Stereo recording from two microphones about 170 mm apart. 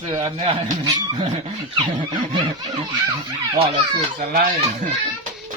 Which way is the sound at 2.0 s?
25° right (ahead or behind).